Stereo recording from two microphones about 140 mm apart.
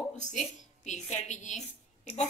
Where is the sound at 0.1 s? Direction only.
60° left (ahead or behind).